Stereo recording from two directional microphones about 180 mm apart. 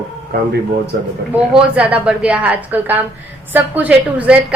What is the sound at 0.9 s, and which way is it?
Speech, 60° right (ahead or behind).